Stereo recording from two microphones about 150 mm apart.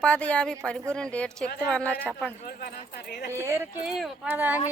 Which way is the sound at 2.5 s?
85° left.